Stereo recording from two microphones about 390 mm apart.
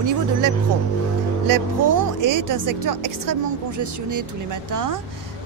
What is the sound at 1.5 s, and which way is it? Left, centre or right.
A woman's voice, right.